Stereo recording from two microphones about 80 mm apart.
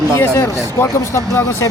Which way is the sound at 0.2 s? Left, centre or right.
Left.